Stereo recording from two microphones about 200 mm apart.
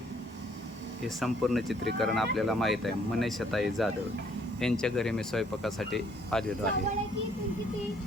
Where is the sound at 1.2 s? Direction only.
Centre (ahead or behind).